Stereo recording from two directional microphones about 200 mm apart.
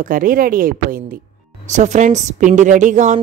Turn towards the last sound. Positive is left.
turn(degrees=-35)  # may be behind; listen again after turning